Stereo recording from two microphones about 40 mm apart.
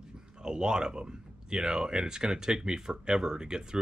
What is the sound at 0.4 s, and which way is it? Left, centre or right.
Speech, centre.